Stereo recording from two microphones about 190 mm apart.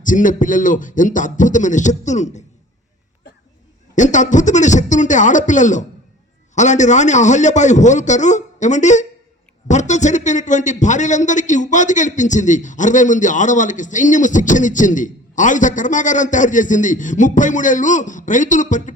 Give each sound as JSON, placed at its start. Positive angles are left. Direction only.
{"t": 0.0, "sound": "speech", "side_deg": 45}
{"t": 3.9, "sound": "a man's voice", "side_deg": 40}